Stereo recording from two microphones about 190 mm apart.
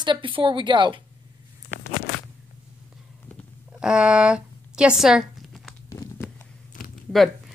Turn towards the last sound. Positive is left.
turn(degrees=0)  # may be behind; listen again after turning